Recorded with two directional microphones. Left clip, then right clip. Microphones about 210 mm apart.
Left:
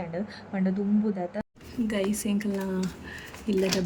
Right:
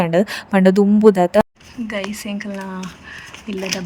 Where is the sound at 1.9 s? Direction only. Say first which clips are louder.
Right 4 dB; 5° left (ahead or behind).